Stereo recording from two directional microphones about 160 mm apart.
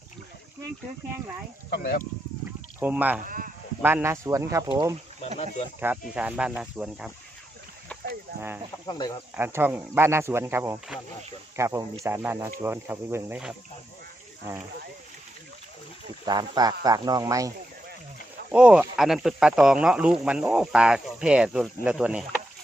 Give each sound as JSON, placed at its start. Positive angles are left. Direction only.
{"t": 1.7, "sound": "speech", "side_deg": 70}
{"t": 2.8, "sound": "speech", "side_deg": -10}
{"t": 3.2, "sound": "speech", "side_deg": -60}
{"t": 3.8, "sound": "speech", "side_deg": -15}
{"t": 5.8, "sound": "speech", "side_deg": -10}
{"t": 8.4, "sound": "speech", "side_deg": -15}
{"t": 8.9, "sound": "speech", "side_deg": 25}
{"t": 9.3, "sound": "speech", "side_deg": -15}
{"t": 16.2, "sound": "speech", "side_deg": -25}
{"t": 18.5, "sound": "speech", "side_deg": -5}